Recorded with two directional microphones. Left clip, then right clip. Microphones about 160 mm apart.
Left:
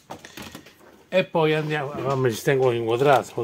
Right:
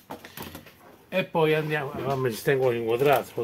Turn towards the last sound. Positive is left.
turn(degrees=30)  # may be behind; listen again after turning